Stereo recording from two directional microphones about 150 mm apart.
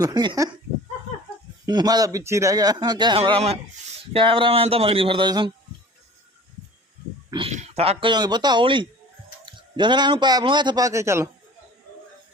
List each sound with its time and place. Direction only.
0.0 s a man's voice: 30° right (ahead or behind)
1.6 s a man's voice: 25° right (ahead or behind)
3.2 s speech: 40° right (ahead or behind)
7.3 s speech: 35° right (ahead or behind)
7.5 s speech: 45° right (ahead or behind)
8.1 s a man's voice: 30° right (ahead or behind)